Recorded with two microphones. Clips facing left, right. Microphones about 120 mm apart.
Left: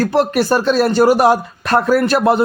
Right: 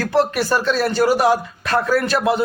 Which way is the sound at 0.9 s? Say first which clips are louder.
Left 4 dB; 55° left (ahead or behind).